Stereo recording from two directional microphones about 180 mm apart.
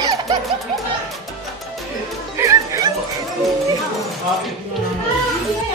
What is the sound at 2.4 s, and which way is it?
Music, 15° right (ahead or behind).